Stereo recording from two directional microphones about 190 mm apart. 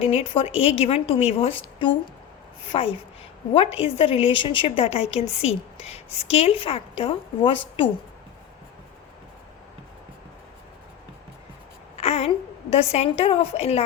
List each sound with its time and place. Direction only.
0.0 s a woman's voice: 30° left (ahead or behind)
11.9 s a sound: 35° left (ahead or behind)
12.7 s a woman's voice: 35° left (ahead or behind)